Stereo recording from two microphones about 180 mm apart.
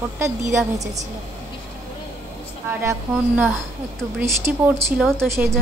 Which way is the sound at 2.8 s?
10° right (ahead or behind).